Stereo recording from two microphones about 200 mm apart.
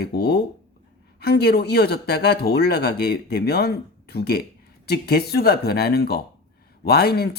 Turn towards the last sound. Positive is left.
turn(degrees=50)  # may be behind; listen again after turning